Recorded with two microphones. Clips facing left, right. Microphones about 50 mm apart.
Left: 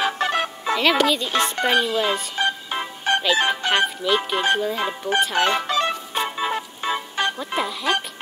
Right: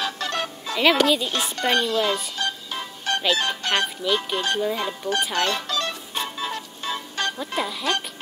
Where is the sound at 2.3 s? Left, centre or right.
Left.